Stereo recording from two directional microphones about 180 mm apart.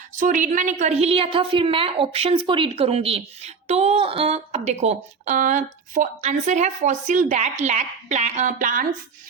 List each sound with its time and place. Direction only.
0.2 s a woman's voice: 45° right (ahead or behind)